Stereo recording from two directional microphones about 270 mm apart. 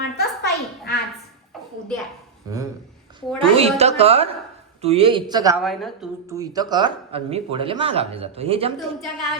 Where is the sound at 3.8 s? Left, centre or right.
Right.